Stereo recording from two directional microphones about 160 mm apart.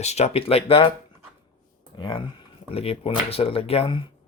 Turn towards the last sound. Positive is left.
turn(degrees=35)  # may be behind; listen again after turning